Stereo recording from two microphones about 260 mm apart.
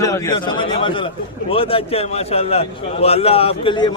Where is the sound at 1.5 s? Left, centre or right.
Left.